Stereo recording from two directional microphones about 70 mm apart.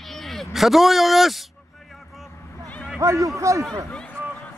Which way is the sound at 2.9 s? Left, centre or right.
Right.